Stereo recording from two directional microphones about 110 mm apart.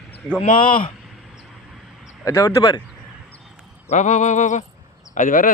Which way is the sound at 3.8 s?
90° left.